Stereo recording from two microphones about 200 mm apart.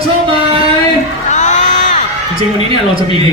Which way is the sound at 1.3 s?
35° left (ahead or behind).